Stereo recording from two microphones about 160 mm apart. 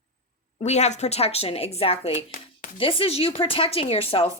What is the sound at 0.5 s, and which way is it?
Speech, 45° left (ahead or behind).